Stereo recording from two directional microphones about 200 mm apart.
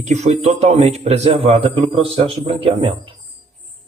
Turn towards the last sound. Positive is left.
turn(degrees=-25)  # may be behind; listen again after turning